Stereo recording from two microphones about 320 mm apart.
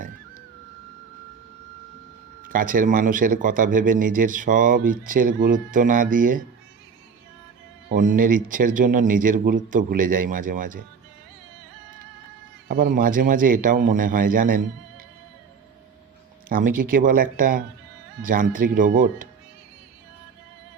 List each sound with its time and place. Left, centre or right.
2.5 s speech: right
7.9 s speech: right
12.6 s speech: right
16.6 s speech: right
16.9 s speech: right